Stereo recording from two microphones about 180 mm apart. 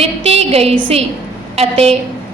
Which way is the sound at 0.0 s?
35° right (ahead or behind).